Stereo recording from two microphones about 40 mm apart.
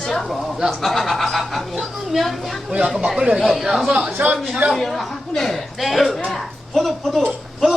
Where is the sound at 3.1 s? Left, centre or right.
Right.